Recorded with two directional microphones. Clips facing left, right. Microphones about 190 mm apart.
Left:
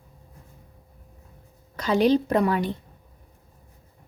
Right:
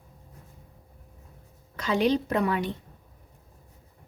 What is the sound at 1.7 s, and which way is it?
Speech, 40° left (ahead or behind).